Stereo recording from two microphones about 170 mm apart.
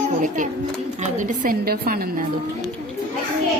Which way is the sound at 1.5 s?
60° right (ahead or behind).